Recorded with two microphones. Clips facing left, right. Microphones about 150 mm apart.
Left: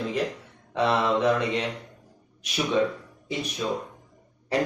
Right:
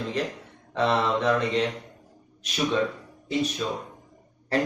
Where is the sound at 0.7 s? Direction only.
10° left (ahead or behind).